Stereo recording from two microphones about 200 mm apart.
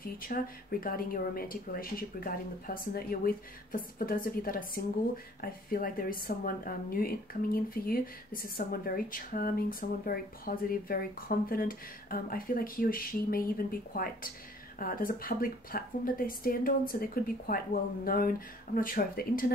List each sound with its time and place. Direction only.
0.0 s speech: 45° left (ahead or behind)